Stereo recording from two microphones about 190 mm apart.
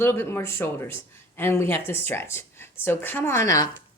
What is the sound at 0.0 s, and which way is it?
Speech, 15° left (ahead or behind).